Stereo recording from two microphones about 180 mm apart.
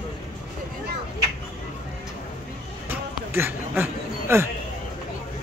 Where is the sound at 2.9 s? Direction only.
10° right (ahead or behind).